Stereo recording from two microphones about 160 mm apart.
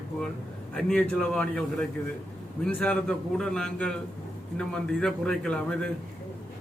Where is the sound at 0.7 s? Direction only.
5° left (ahead or behind).